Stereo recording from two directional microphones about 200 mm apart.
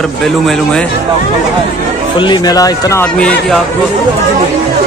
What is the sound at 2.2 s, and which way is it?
Speech, 20° left (ahead or behind).